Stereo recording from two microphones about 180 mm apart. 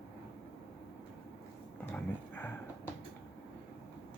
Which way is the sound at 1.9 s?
10° left (ahead or behind).